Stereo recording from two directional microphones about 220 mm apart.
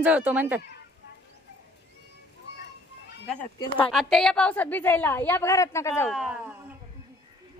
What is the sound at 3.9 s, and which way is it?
A woman's voice, centre (ahead or behind).